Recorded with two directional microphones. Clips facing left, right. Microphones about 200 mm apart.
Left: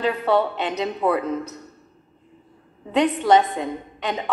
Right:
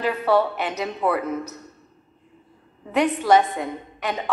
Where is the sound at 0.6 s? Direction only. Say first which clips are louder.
Left 2 dB; 20° left (ahead or behind).